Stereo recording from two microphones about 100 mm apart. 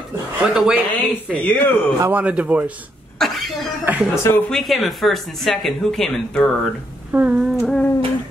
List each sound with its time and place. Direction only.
0.4 s speech: 5° right (ahead or behind)
0.9 s speech: 15° left (ahead or behind)
2.0 s a man's voice: 25° right (ahead or behind)
2.2 s speech: 10° right (ahead or behind)
3.2 s cough: centre (ahead or behind)
3.8 s speech: 15° right (ahead or behind)
4.1 s speech: 30° left (ahead or behind)
4.5 s speech: centre (ahead or behind)
7.1 s a sound: 15° right (ahead or behind)
7.3 s speech: 5° right (ahead or behind)